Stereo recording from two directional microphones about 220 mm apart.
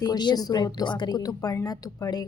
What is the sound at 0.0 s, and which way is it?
A woman's voice, 20° left (ahead or behind).